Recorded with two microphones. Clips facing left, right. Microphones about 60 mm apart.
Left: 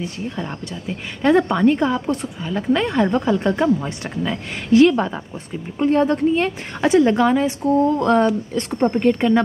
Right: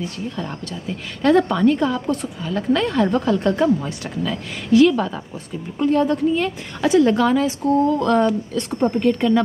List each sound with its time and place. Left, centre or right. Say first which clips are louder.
0.4 s a woman's voice: even; centre; by 7.0 s left
7.0 s speech: even; centre
7.7 s speech: left 1 dB; left